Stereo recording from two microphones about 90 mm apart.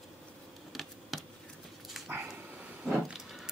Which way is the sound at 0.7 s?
Centre (ahead or behind).